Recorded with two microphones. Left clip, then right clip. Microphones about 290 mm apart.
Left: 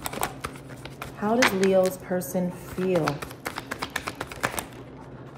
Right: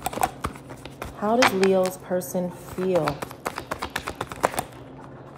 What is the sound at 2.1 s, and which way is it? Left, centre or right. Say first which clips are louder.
Speech: right 2 dB; centre.